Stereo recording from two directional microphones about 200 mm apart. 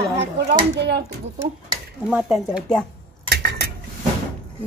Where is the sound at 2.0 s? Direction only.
5° right (ahead or behind).